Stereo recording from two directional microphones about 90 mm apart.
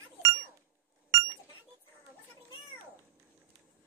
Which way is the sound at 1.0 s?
35° right (ahead or behind).